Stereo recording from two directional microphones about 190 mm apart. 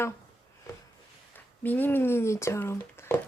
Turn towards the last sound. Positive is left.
turn(degrees=15)  # may be behind; listen again after turning